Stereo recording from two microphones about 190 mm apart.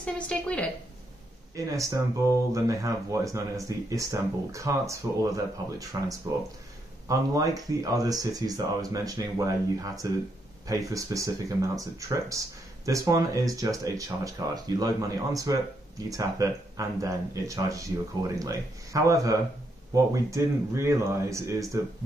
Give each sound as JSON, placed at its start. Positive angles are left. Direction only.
{"t": 0.0, "sound": "a woman's voice", "side_deg": 5}
{"t": 1.5, "sound": "speech", "side_deg": -15}